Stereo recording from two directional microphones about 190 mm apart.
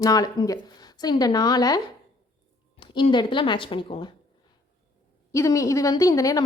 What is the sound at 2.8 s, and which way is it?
Speech, 25° left (ahead or behind).